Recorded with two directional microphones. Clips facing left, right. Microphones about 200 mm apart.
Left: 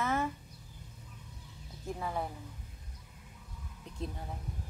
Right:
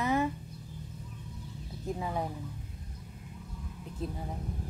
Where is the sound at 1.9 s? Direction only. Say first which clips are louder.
Right 2 dB; 15° right (ahead or behind).